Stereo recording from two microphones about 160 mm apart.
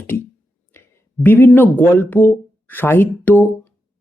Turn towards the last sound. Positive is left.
turn(degrees=10)  # may be behind; listen again after turning